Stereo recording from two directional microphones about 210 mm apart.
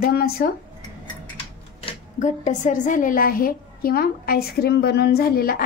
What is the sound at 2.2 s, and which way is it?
A woman's voice, 35° left (ahead or behind).